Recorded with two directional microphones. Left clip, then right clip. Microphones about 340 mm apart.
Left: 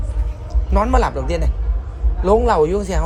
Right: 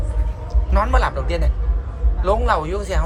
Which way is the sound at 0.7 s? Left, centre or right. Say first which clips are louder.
Left 2 dB; left.